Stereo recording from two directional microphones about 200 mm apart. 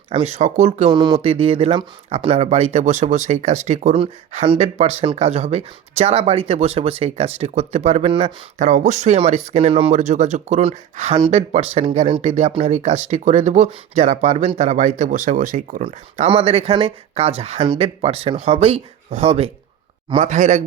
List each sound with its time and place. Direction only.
0.1 s speech: 30° right (ahead or behind)
0.9 s speech: 20° right (ahead or behind)